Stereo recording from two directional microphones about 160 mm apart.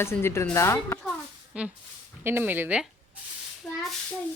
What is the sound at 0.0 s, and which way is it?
Speech, 15° left (ahead or behind).